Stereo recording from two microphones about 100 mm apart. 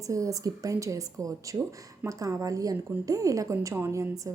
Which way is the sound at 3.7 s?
20° right (ahead or behind).